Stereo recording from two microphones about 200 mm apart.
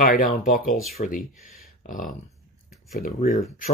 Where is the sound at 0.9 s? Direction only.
40° left (ahead or behind).